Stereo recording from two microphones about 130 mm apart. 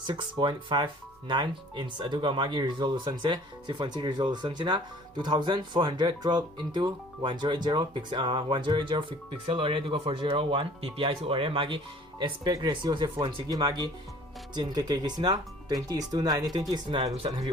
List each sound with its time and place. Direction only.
0.1 s speech: 35° right (ahead or behind)